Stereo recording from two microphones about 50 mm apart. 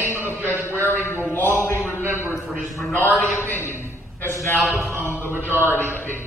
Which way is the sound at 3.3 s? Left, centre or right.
Left.